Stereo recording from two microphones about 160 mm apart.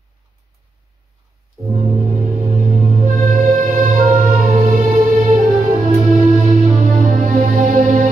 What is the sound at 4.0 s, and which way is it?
Music, 30° right (ahead or behind).